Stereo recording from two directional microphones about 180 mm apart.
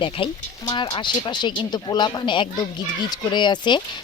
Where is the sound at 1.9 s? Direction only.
25° left (ahead or behind).